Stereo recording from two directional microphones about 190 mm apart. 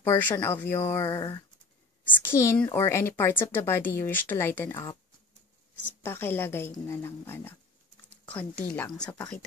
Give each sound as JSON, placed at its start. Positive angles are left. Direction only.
{"t": 0.0, "sound": "a woman's voice", "side_deg": 10}
{"t": 6.0, "sound": "a woman's voice", "side_deg": 10}